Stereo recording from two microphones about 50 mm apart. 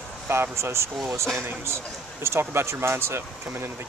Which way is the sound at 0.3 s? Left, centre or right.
Right.